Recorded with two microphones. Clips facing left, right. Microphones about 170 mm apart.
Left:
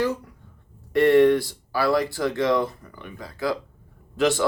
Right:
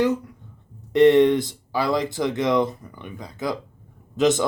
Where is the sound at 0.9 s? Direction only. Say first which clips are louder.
Right 2 dB; 20° right (ahead or behind).